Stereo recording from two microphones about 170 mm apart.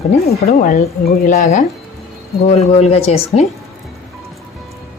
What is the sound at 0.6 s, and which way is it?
Speech, 60° left (ahead or behind).